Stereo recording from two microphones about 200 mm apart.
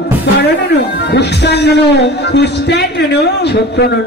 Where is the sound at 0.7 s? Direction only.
60° left (ahead or behind).